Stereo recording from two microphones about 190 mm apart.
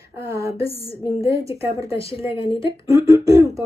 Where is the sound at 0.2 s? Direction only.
15° right (ahead or behind).